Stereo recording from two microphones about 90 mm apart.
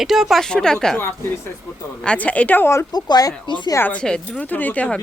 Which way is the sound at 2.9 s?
45° left (ahead or behind).